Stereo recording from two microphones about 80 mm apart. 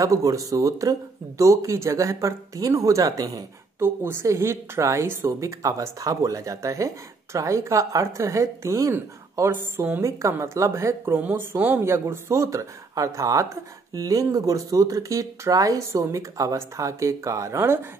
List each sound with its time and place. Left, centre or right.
0.0 s speech: right
3.8 s speech: right
9.5 s speech: right
10.0 s speech: right
11.1 s speech: right